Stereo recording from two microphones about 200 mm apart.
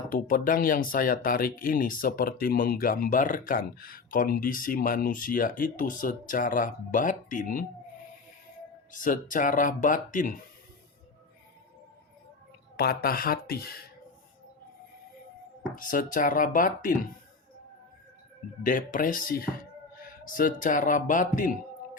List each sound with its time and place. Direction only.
0.1 s speech: 45° left (ahead or behind)
8.9 s speech: 40° left (ahead or behind)
12.7 s speech: 50° left (ahead or behind)
15.7 s speech: 40° left (ahead or behind)
18.6 s speech: 40° left (ahead or behind)